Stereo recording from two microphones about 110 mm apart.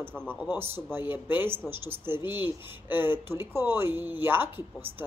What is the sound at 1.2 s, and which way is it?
Speech, 20° right (ahead or behind).